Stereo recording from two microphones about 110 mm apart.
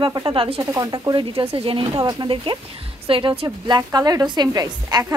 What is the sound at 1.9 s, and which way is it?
Speech, 35° right (ahead or behind).